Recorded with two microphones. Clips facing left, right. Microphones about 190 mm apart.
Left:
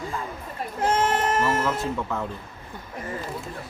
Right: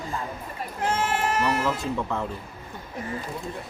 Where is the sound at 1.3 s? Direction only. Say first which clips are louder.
Left 1 dB; 40° left (ahead or behind).